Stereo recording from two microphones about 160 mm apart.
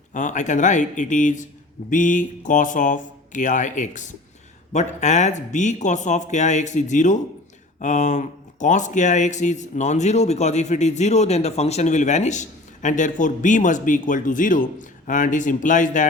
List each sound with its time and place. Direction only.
0.1 s speech: 50° left (ahead or behind)